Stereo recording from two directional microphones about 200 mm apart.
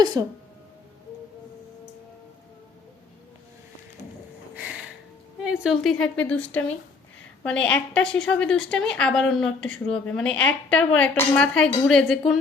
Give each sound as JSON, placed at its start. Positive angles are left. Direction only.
{"t": 0.0, "sound": "speech", "side_deg": -20}
{"t": 5.4, "sound": "a woman's voice", "side_deg": -5}